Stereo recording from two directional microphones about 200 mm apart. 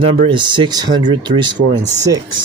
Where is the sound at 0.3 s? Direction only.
25° right (ahead or behind).